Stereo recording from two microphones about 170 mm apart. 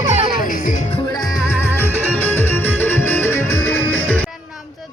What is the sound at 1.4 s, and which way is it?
Music, 15° left (ahead or behind).